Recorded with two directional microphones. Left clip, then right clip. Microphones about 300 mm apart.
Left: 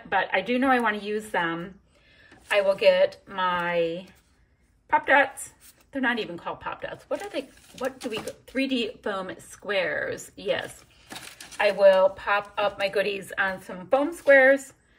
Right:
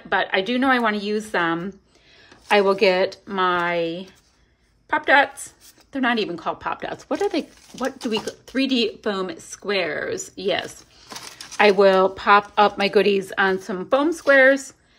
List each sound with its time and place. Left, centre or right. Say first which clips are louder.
0.1 s speech: right 3 dB; centre
11.8 s speech: right 2 dB; right